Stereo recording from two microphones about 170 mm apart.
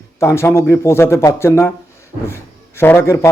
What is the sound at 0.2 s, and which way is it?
A man's voice, 15° left (ahead or behind).